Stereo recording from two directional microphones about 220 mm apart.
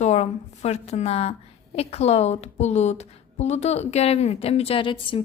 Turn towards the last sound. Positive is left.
turn(degrees=25)  # may be behind; listen again after turning